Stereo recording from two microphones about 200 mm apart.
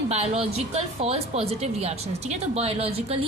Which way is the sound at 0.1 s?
30° right (ahead or behind).